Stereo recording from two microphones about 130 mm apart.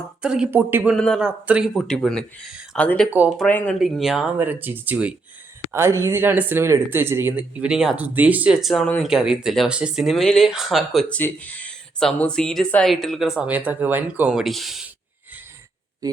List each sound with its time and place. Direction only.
0.2 s speech: 5° right (ahead or behind)
0.5 s speech: 15° right (ahead or behind)
0.9 s speech: 5° left (ahead or behind)
1.2 s speech: 10° right (ahead or behind)
1.7 s speech: 5° left (ahead or behind)
3.1 s speech: 10° right (ahead or behind)
3.8 s speech: centre (ahead or behind)
4.4 s speech: 15° right (ahead or behind); by 11.2 s centre (ahead or behind)
11.2 s speech: 10° left (ahead or behind); by 14.3 s 15° right (ahead or behind)
14.3 s speech: centre (ahead or behind)